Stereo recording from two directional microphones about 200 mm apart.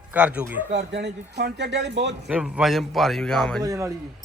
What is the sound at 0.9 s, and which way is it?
A man's voice, 55° right (ahead or behind).